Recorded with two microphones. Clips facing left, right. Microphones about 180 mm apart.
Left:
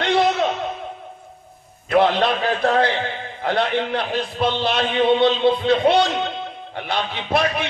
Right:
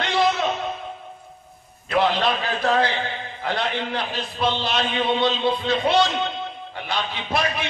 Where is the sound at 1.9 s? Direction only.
55° left (ahead or behind).